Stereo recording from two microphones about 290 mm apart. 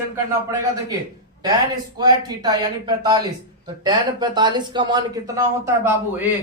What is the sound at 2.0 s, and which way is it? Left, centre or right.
Speech, centre.